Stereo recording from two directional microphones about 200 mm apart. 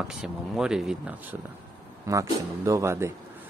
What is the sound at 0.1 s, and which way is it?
Speech, 5° right (ahead or behind).